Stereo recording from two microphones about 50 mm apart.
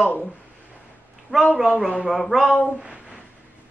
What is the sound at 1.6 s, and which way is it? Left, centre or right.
Speech, centre.